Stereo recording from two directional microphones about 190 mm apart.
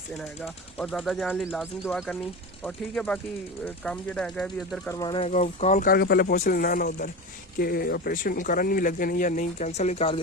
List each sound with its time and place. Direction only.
0.2 s speech: centre (ahead or behind)
4.9 s speech: 20° left (ahead or behind)
5.2 s speech: 35° left (ahead or behind)
5.9 s speech: 55° left (ahead or behind)
6.3 s speech: 45° left (ahead or behind)